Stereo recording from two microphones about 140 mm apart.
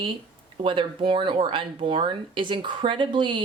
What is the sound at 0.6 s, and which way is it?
Speech, 35° right (ahead or behind).